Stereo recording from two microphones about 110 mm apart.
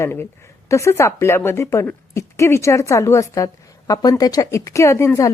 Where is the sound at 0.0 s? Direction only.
20° left (ahead or behind).